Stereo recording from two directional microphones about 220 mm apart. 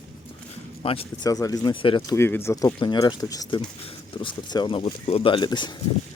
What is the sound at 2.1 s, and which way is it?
Speech, 10° left (ahead or behind).